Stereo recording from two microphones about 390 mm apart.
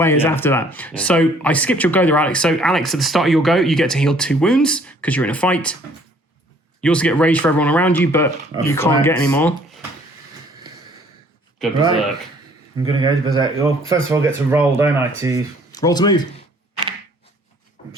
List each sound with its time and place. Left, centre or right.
0.0 s speech: centre
6.8 s speech: centre
12.8 s speech: centre
15.7 s speech: centre